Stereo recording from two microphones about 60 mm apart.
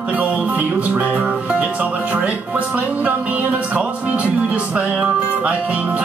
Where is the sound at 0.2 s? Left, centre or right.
Right.